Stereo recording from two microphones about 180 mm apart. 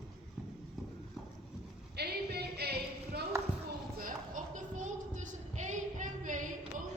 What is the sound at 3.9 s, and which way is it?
Music, 50° right (ahead or behind).